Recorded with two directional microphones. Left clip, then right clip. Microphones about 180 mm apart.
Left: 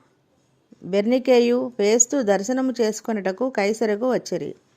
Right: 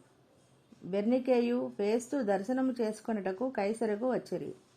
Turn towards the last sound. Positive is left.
turn(degrees=30)  # may be behind; listen again after turning